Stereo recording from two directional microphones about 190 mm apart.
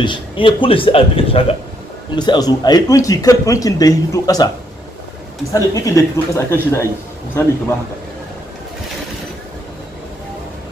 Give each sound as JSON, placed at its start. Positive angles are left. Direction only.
{"t": 0.0, "sound": "speech", "side_deg": 25}
{"t": 5.5, "sound": "speech", "side_deg": 15}